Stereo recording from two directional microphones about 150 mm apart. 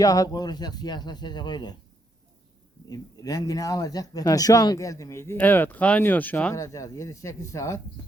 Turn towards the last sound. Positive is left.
turn(degrees=20)  # may be behind; listen again after turning